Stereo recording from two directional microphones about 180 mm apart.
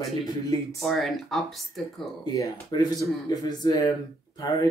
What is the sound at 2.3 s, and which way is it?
Speech, 20° left (ahead or behind).